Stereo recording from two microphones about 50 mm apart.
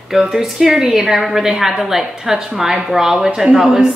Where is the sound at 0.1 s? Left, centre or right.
Centre.